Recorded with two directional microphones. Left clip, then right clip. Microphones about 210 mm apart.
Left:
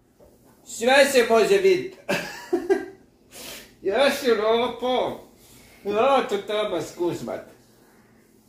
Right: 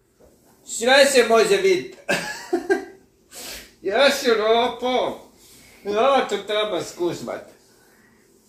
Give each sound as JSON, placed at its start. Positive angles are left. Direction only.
{"t": 0.7, "sound": "speech", "side_deg": 5}
{"t": 2.5, "sound": "cough", "side_deg": 0}
{"t": 3.3, "sound": "speech", "side_deg": 0}